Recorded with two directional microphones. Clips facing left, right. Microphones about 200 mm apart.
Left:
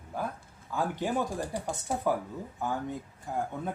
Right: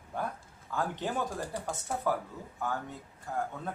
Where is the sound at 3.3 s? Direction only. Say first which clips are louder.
Left 2 dB; 15° left (ahead or behind).